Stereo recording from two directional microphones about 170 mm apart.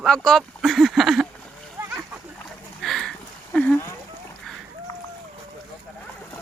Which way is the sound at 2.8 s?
Centre (ahead or behind).